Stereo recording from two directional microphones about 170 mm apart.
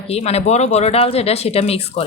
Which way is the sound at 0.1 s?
40° left (ahead or behind).